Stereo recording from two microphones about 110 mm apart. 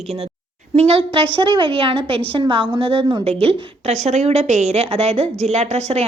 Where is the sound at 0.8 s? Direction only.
65° right (ahead or behind).